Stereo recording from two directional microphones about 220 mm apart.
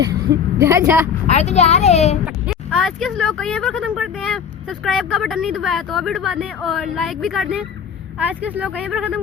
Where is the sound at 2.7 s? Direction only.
Centre (ahead or behind).